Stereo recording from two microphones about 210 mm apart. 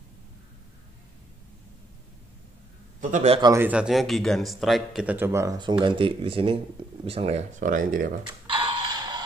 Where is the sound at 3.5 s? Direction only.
10° right (ahead or behind); by 8.1 s 40° right (ahead or behind).